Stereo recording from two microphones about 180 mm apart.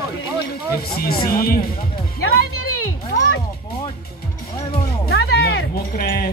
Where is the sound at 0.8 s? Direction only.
60° left (ahead or behind).